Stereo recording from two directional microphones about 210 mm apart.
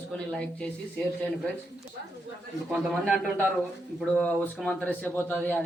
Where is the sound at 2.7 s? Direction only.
5° right (ahead or behind).